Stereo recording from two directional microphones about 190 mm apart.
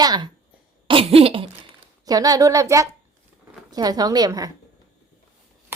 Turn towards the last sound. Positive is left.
turn(degrees=-20)  # may be behind; listen again after turning